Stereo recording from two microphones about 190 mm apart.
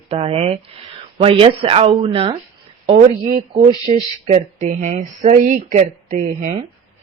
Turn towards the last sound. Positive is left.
turn(degrees=-40)  # may be behind; listen again after turning